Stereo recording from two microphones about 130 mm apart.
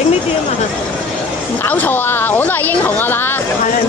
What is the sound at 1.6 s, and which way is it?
A woman's voice, 15° left (ahead or behind).